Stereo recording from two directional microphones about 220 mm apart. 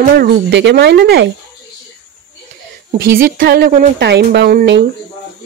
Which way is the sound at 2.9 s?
40° right (ahead or behind).